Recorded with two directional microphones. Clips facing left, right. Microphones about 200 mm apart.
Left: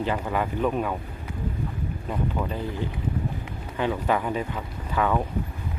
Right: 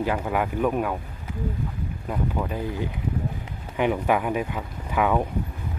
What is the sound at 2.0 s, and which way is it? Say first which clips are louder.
Speech: right 1 dB; 10° right (ahead or behind).